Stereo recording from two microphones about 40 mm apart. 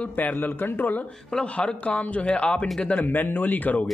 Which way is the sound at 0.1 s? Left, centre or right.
Left.